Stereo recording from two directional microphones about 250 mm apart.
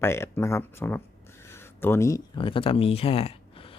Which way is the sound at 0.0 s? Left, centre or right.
Centre.